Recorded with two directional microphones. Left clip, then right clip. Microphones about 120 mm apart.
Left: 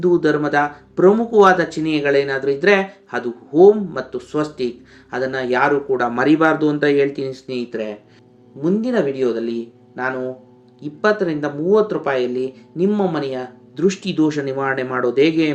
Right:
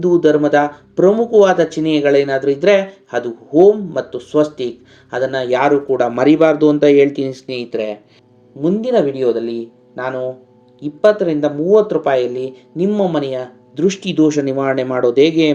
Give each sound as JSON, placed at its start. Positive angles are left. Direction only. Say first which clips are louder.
{"t": 0.0, "sound": "speech", "louder": "right 4 dB", "side_deg": -15}